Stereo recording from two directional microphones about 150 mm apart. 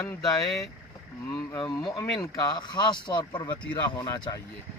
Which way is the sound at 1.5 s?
30° left (ahead or behind).